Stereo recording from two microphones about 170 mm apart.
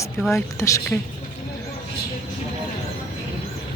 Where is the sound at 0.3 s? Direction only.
15° left (ahead or behind).